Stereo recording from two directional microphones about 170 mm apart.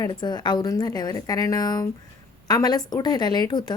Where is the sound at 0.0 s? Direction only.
25° left (ahead or behind).